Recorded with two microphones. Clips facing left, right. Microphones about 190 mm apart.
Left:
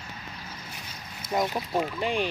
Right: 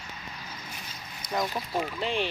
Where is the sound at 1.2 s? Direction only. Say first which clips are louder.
Left 3 dB; 20° left (ahead or behind).